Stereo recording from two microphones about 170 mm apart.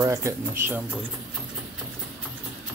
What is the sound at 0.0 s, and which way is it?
Speech, 20° right (ahead or behind).